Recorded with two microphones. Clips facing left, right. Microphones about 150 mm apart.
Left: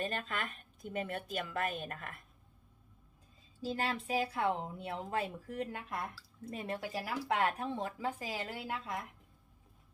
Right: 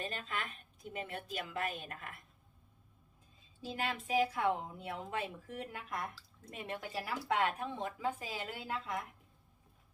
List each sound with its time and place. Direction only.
0.0 s a sound: 45° left (ahead or behind)
0.9 s a woman's voice: 45° left (ahead or behind)
3.6 s speech: 35° left (ahead or behind)
6.5 s speech: 35° left (ahead or behind)